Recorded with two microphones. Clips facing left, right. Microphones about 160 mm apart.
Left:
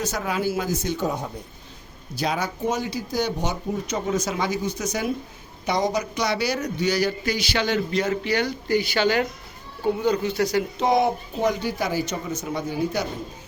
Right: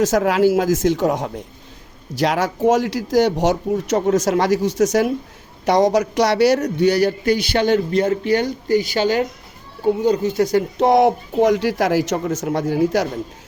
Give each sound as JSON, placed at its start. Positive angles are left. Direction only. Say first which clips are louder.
{"t": 0.0, "sound": "speech", "louder": "right 10 dB", "side_deg": -90}